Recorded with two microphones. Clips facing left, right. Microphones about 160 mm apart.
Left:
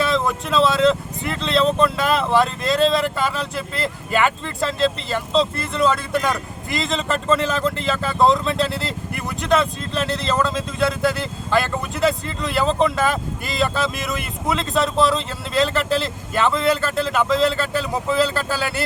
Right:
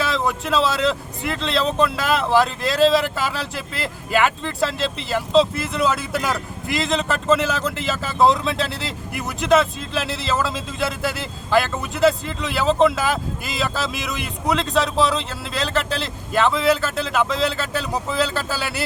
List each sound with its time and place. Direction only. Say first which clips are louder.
0.0 s speech: left 2 dB; centre (ahead or behind)